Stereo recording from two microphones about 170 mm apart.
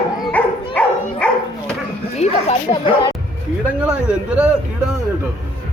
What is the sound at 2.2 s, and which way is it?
Speech, 35° left (ahead or behind).